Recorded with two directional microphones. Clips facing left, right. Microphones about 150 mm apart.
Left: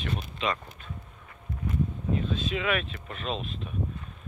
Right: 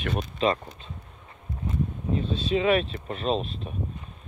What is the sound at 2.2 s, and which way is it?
Speech, 35° right (ahead or behind).